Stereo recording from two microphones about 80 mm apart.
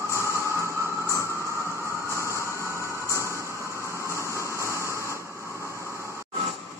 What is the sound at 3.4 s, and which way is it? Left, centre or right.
Vehicle, right.